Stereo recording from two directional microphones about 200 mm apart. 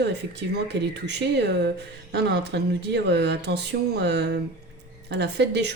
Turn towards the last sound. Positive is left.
turn(degrees=-60)  # may be behind; listen again after turning